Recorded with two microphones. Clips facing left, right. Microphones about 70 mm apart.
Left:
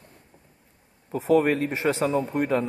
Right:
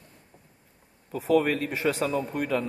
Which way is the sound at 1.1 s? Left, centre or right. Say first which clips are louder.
Left 3 dB; left.